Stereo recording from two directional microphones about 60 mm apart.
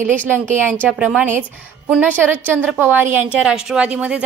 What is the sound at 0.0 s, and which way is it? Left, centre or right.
Speech, right.